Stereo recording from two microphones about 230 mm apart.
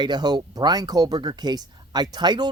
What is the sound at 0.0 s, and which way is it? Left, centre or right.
Speech, centre.